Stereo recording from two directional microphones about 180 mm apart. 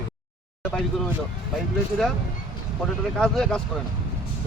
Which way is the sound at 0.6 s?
5° left (ahead or behind).